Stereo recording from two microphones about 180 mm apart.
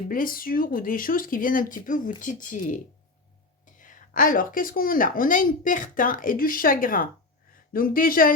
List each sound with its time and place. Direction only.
0.1 s speech: 50° left (ahead or behind)